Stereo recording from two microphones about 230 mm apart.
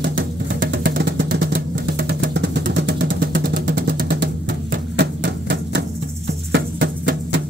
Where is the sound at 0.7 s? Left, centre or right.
Right.